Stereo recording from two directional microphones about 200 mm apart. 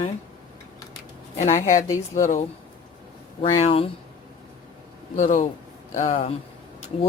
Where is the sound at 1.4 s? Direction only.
35° left (ahead or behind).